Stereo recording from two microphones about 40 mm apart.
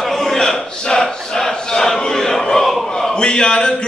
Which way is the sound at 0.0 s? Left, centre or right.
Centre.